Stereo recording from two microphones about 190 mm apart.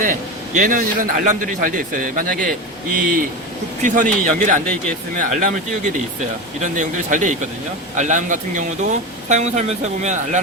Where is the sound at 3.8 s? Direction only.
40° right (ahead or behind).